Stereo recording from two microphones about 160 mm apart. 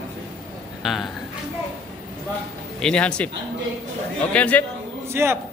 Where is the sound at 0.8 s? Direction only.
Centre (ahead or behind).